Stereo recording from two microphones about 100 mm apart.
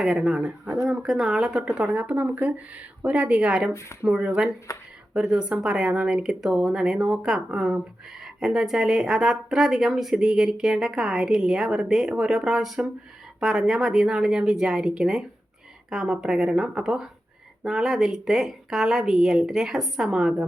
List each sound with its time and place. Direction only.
0.0 s speech: 10° right (ahead or behind)
3.7 s speech: 30° left (ahead or behind)
4.0 s speech: 10° right (ahead or behind)
4.7 s speech: 30° left (ahead or behind)
5.1 s speech: 10° right (ahead or behind)